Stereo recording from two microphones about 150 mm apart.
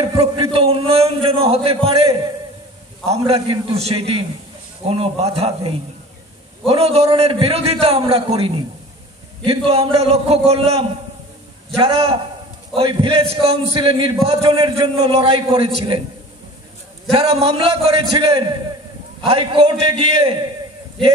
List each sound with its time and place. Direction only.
0.0 s a sound: 35° right (ahead or behind)
3.1 s a man's voice: 40° right (ahead or behind)
17.1 s a man's voice: 40° right (ahead or behind)